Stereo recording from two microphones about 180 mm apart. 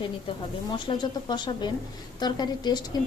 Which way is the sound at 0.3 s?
25° left (ahead or behind).